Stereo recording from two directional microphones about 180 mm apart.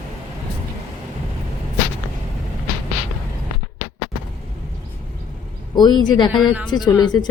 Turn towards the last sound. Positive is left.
turn(degrees=25)  # may be behind; listen again after turning